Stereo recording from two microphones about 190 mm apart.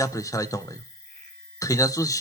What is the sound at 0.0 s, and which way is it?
Speech, 15° left (ahead or behind).